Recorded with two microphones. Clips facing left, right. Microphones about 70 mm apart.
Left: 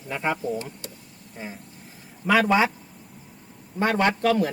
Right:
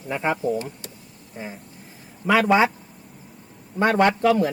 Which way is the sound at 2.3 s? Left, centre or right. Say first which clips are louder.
Right 2 dB; centre.